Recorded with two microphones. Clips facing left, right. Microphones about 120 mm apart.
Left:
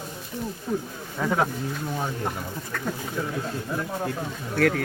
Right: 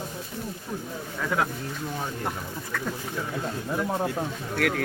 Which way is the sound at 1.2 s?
25° left (ahead or behind).